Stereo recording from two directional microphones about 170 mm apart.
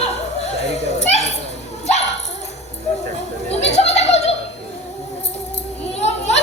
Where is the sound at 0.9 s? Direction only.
40° left (ahead or behind).